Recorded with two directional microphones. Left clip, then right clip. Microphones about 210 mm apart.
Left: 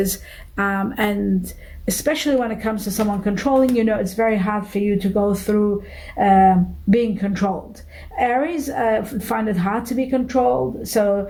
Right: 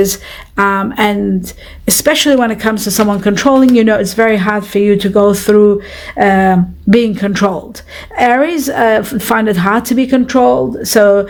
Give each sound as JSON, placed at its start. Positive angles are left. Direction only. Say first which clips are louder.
{"t": 0.0, "sound": "speech", "louder": "right 11 dB", "side_deg": -30}